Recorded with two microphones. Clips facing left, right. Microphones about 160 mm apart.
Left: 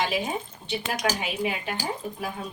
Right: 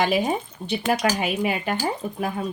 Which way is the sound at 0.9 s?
60° right (ahead or behind).